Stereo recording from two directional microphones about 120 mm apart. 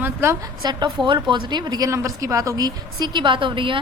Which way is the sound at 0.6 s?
40° right (ahead or behind).